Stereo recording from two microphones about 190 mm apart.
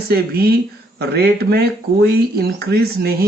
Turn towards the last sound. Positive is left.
turn(degrees=-50)  # may be behind; listen again after turning